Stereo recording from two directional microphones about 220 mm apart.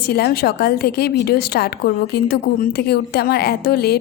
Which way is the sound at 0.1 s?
45° left (ahead or behind).